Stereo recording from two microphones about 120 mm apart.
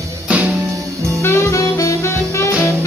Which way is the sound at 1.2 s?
20° left (ahead or behind).